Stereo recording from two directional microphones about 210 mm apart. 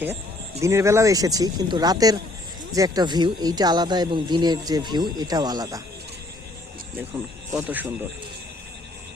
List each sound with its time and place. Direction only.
0.6 s speech: 15° right (ahead or behind)
7.5 s speech: 10° right (ahead or behind)